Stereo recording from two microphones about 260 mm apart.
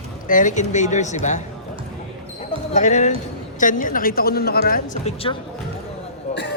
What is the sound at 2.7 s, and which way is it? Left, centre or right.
A man's voice, left.